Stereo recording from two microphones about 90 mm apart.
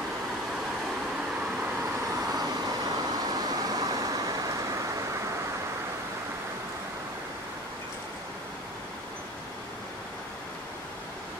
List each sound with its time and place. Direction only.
2.3 s vehicle: 45° right (ahead or behind)